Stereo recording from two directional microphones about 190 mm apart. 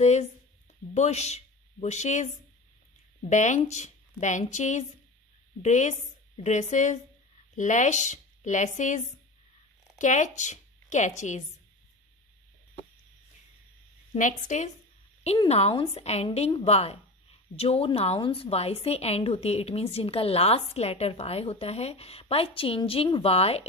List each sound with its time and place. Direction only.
0.0 s a woman's voice: 35° left (ahead or behind)
14.1 s a woman's voice: 40° left (ahead or behind)